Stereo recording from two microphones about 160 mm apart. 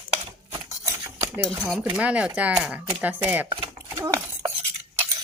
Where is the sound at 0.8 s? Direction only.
15° right (ahead or behind).